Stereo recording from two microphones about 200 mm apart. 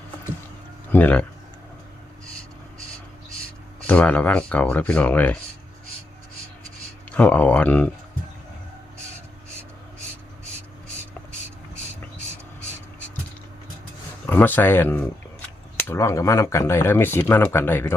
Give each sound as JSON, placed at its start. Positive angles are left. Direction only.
{"t": 0.9, "sound": "speech", "side_deg": 10}
{"t": 3.8, "sound": "speech", "side_deg": 10}
{"t": 7.1, "sound": "speech", "side_deg": 5}
{"t": 14.3, "sound": "speech", "side_deg": 10}